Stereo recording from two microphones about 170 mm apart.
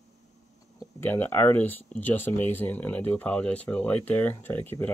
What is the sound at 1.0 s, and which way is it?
Speech, 10° left (ahead or behind).